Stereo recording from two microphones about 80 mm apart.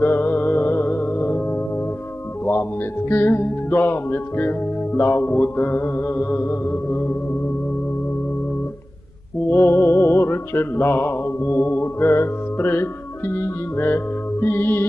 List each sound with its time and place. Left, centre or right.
0.0 s music: left
3.1 s music: left
9.5 s music: left